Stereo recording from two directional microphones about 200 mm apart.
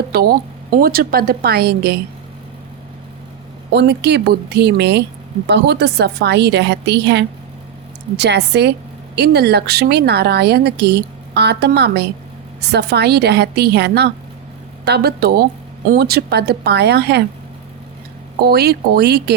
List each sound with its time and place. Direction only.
0.1 s speech: 50° right (ahead or behind)
3.7 s a woman's voice: 55° right (ahead or behind)
18.4 s speech: 55° right (ahead or behind)